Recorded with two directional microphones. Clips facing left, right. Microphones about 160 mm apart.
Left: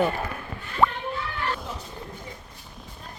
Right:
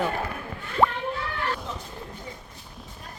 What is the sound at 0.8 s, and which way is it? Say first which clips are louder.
Children playing: even; 15° right (ahead or behind).